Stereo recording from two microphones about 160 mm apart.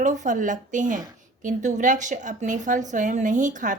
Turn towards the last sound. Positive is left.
turn(degrees=-50)  # may be behind; listen again after turning